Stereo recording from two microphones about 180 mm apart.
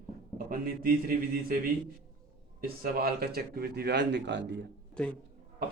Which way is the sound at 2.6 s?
55° right (ahead or behind).